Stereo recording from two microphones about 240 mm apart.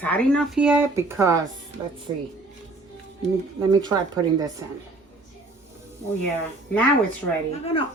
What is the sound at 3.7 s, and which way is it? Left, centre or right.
Speech, centre.